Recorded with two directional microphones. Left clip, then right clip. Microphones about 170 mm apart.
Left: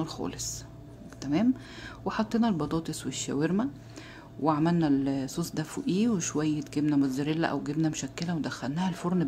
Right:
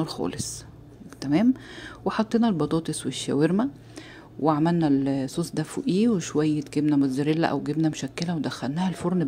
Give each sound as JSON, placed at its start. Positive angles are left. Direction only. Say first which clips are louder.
{"t": 0.0, "sound": "speech", "louder": "right 5 dB", "side_deg": -30}